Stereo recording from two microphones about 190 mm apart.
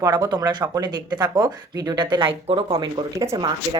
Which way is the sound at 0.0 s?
20° right (ahead or behind).